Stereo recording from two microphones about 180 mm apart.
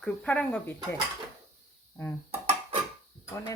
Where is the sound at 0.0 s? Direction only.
5° left (ahead or behind).